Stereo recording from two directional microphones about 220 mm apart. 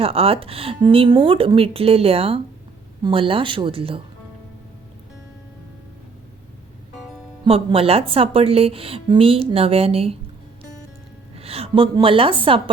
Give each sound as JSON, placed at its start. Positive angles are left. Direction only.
{"t": 0.0, "sound": "a woman's voice", "side_deg": -25}
{"t": 7.4, "sound": "a woman's voice", "side_deg": -25}
{"t": 11.3, "sound": "a woman's voice", "side_deg": -25}